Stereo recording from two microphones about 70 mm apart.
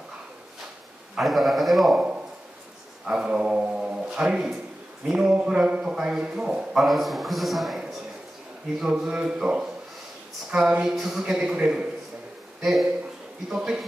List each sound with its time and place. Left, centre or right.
1.2 s a man's voice: centre
2.0 s a sound: centre
3.1 s a man's voice: centre
6.8 s a man's voice: centre
12.6 s a man's voice: centre